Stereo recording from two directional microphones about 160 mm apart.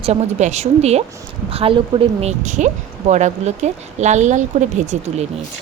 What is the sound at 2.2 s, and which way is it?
Speech, 50° right (ahead or behind).